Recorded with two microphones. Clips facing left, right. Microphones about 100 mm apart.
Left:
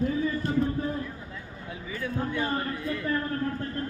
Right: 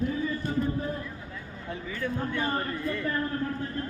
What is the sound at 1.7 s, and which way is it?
A man's voice, 5° left (ahead or behind).